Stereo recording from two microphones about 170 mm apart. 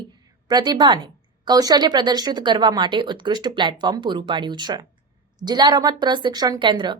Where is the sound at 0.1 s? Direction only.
25° right (ahead or behind).